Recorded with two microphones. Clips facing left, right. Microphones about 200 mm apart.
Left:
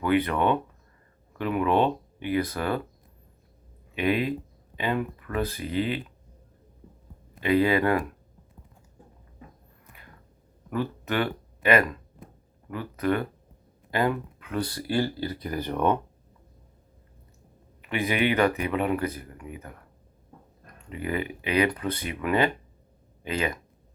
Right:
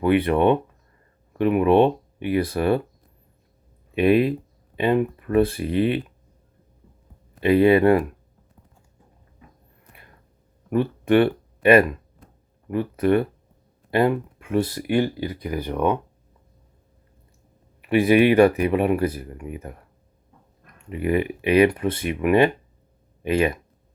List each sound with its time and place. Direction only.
0.0 s speech: 25° right (ahead or behind)
3.9 s speech: 30° right (ahead or behind)
7.4 s speech: 30° right (ahead or behind)
10.7 s speech: 30° right (ahead or behind); by 16.0 s 10° right (ahead or behind)
17.8 s speech: 30° right (ahead or behind)
20.9 s speech: 25° right (ahead or behind)